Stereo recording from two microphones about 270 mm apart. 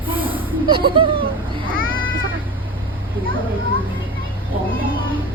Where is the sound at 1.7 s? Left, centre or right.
Right.